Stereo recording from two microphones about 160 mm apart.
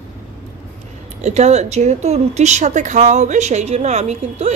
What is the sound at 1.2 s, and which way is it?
Speech, 45° right (ahead or behind).